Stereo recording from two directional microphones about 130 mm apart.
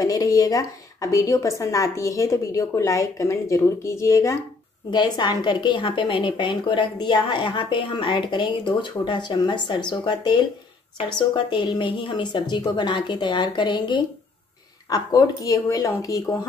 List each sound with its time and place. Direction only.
0.0 s a woman's voice: 25° left (ahead or behind)
4.9 s a woman's voice: 35° left (ahead or behind)